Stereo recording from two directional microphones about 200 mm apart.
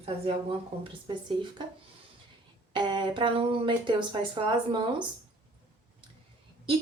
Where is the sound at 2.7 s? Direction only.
25° right (ahead or behind).